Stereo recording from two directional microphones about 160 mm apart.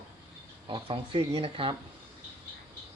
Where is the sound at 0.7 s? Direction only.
35° right (ahead or behind).